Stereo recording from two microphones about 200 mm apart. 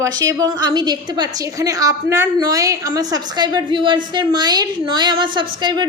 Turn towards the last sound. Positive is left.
turn(degrees=-20)  # may be behind; listen again after turning